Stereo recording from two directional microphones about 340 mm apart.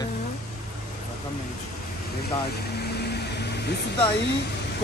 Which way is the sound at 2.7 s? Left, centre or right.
Left.